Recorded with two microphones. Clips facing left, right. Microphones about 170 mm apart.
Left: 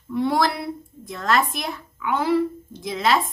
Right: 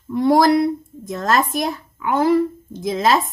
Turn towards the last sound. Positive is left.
turn(degrees=-40)  # may be behind; listen again after turning